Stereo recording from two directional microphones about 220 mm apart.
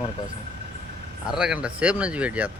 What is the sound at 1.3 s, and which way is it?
Speech, 5° right (ahead or behind).